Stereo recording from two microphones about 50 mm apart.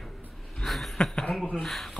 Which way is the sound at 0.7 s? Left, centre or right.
Centre.